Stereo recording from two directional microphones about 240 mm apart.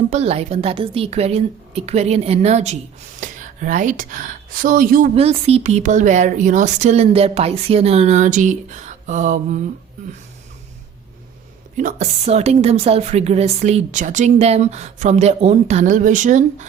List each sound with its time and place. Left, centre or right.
0.1 s a woman's voice: right
11.8 s a woman's voice: right